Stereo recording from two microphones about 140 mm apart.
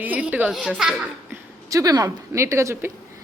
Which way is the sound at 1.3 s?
25° right (ahead or behind).